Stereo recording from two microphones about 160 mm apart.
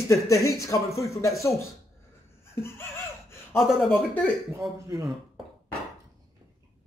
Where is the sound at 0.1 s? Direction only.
20° left (ahead or behind).